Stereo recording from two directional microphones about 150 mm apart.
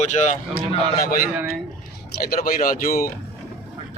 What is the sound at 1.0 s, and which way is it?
Speech, 75° left (ahead or behind).